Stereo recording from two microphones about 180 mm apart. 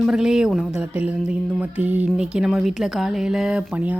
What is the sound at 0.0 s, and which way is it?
A woman's voice, centre (ahead or behind).